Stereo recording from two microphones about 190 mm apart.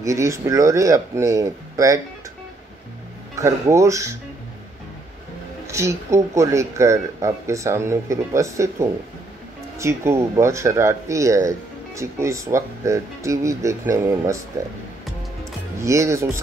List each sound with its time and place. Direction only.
0.0 s speech: 15° right (ahead or behind)
3.3 s speech: 15° right (ahead or behind)
5.7 s speech: 15° right (ahead or behind)
15.8 s speech: 15° right (ahead or behind)